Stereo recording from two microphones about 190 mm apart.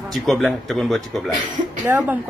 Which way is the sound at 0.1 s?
Centre (ahead or behind).